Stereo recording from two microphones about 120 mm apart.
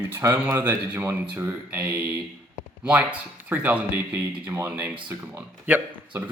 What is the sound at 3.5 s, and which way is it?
Speech, 15° right (ahead or behind).